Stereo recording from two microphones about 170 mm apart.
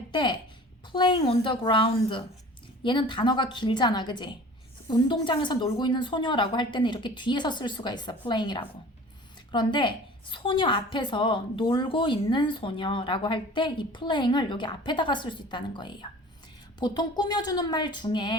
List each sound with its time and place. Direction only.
0.1 s a woman's voice: 25° left (ahead or behind)